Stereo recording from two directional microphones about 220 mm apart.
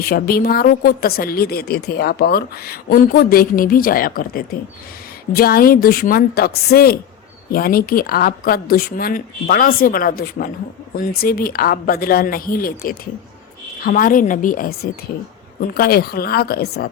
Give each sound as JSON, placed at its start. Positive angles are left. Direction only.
{"t": 0.0, "sound": "a woman's voice", "side_deg": 45}